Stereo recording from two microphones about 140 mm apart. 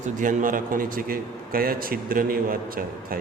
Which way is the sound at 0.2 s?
70° right (ahead or behind).